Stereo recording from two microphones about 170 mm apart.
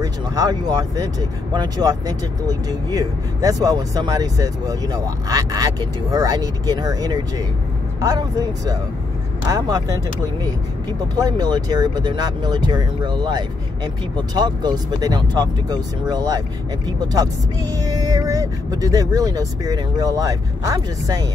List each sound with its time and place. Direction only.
0.0 s speech: 20° right (ahead or behind)
11.1 s speech: 20° right (ahead or behind)